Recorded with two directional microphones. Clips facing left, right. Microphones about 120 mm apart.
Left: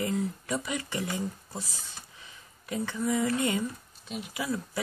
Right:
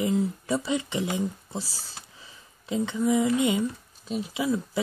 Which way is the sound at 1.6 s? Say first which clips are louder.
Right 4 dB; 30° right (ahead or behind).